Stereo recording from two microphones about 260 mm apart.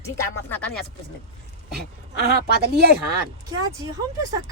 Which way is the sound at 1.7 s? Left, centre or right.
Right.